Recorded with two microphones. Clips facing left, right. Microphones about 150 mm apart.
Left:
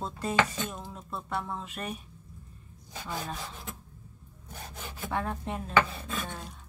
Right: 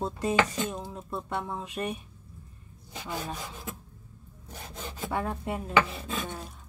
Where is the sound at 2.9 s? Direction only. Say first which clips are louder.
Right 1 dB; 15° right (ahead or behind).